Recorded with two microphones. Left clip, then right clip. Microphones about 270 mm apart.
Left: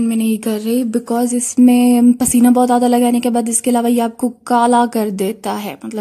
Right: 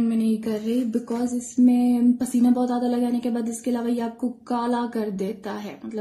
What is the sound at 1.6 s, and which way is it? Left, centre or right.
A woman's voice, left.